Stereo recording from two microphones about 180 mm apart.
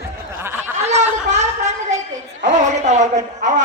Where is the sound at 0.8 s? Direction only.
40° right (ahead or behind).